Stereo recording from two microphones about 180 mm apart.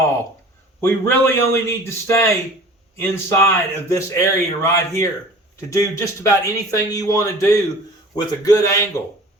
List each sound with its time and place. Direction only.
0.8 s speech: 10° left (ahead or behind)